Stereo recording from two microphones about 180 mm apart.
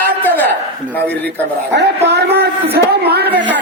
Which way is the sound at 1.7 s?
65° right (ahead or behind).